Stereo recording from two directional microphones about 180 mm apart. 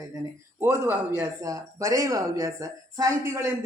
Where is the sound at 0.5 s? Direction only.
15° right (ahead or behind).